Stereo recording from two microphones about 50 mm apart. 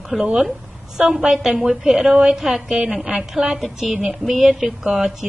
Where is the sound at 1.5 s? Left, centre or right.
Centre.